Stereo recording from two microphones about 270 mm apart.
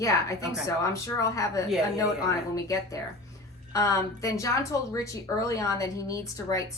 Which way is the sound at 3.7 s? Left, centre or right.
Centre.